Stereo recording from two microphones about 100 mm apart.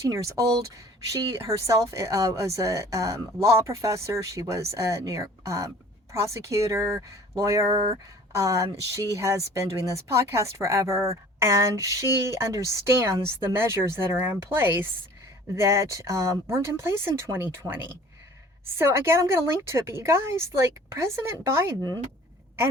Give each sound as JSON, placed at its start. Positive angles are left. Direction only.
{"t": 0.1, "sound": "speech", "side_deg": -35}
{"t": 21.8, "sound": "speech", "side_deg": 25}